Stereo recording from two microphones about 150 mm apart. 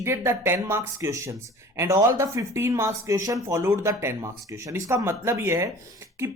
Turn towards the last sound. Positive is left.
turn(degrees=-20)  # may be behind; listen again after turning